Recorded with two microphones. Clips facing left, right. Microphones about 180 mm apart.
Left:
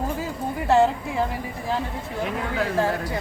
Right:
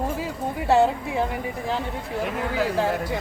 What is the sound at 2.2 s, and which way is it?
Speech, centre (ahead or behind).